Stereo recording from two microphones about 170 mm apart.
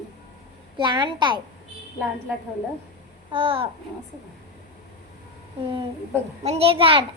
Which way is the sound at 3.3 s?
30° right (ahead or behind).